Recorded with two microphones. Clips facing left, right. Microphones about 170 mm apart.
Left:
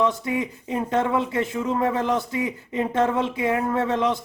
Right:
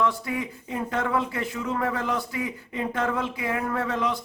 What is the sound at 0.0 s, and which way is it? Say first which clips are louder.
Speech: left 3 dB; 20° left (ahead or behind).